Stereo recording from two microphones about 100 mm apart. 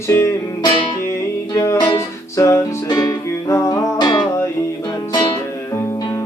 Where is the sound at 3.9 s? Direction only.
45° left (ahead or behind).